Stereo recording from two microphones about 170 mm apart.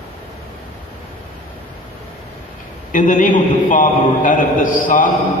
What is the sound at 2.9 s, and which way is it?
A man's voice, 50° left (ahead or behind).